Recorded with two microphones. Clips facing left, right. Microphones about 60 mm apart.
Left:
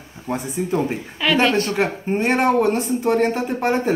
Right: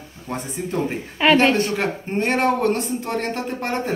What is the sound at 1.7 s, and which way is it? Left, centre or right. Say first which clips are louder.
Speech: left 2 dB; centre.